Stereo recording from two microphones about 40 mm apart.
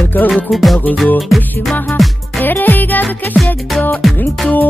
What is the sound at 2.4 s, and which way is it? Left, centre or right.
Music, left.